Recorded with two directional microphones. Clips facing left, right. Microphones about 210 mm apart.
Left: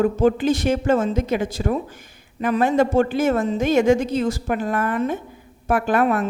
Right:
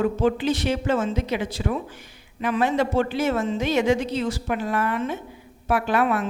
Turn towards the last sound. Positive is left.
turn(degrees=45)  # may be behind; listen again after turning